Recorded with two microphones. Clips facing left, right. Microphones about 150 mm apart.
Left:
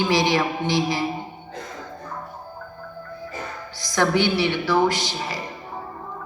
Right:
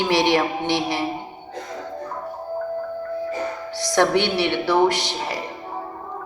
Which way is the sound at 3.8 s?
70° right (ahead or behind).